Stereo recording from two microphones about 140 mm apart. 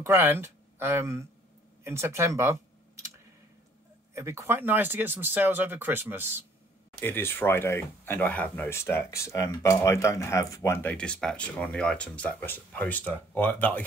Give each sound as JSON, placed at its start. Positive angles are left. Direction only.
{"t": 0.0, "sound": "speech", "side_deg": -15}
{"t": 4.1, "sound": "speech", "side_deg": -20}
{"t": 7.0, "sound": "speech", "side_deg": 15}